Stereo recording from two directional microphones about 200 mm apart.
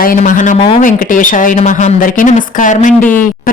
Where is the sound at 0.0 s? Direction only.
45° left (ahead or behind).